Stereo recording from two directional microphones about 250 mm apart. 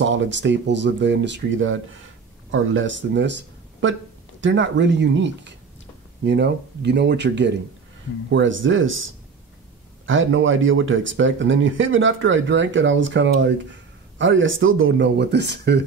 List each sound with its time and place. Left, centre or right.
0.0 s speech: right